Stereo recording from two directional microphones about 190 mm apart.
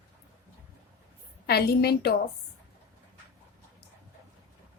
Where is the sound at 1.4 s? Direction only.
55° left (ahead or behind).